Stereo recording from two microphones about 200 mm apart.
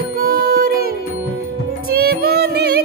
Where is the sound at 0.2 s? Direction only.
50° right (ahead or behind).